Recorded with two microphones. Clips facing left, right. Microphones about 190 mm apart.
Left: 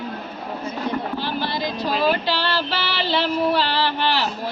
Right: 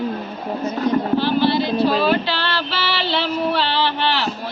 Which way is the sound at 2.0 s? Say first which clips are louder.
Right 2 dB; 10° left (ahead or behind).